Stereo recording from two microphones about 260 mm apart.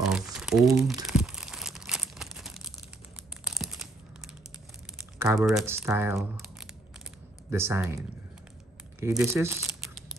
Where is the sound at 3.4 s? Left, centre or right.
Centre.